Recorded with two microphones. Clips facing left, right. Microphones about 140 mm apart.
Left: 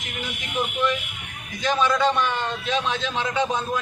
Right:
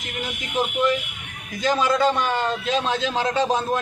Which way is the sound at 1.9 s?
40° right (ahead or behind).